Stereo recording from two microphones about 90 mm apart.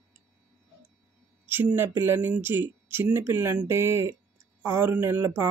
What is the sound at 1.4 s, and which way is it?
A man's voice, 25° right (ahead or behind).